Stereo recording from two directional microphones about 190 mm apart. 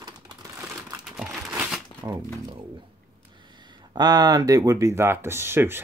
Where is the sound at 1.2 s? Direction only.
5° right (ahead or behind).